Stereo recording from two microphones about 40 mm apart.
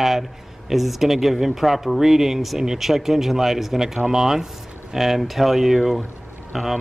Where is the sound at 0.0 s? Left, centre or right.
Centre.